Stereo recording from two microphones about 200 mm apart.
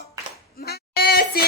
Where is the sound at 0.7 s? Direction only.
50° left (ahead or behind).